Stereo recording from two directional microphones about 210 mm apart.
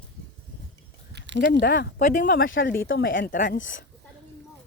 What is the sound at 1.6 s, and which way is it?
Speech, 45° left (ahead or behind).